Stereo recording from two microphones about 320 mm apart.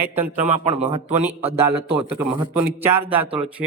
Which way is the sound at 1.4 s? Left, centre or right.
Centre.